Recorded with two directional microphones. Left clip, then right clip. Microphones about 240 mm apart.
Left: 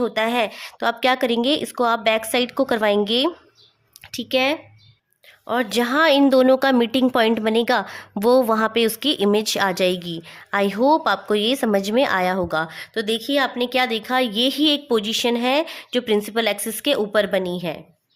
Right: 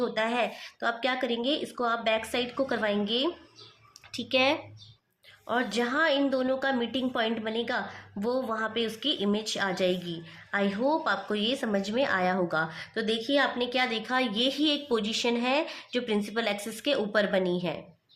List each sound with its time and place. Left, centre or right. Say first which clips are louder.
0.0 s speech: left 7 dB; left